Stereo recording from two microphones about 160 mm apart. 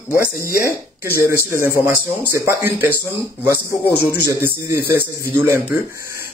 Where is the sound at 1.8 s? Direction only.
15° right (ahead or behind).